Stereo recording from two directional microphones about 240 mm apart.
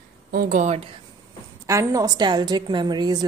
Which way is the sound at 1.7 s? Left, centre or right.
Centre.